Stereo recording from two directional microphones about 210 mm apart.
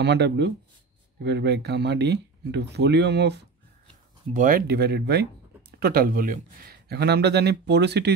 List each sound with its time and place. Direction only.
0.0 s speech: 55° right (ahead or behind)
4.3 s speech: 40° right (ahead or behind)